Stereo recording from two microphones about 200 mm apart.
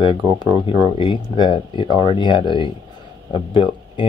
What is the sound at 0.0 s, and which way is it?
Speech, 25° left (ahead or behind).